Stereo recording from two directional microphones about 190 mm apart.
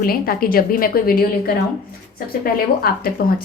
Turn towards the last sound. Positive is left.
turn(degrees=50)  # may be behind; listen again after turning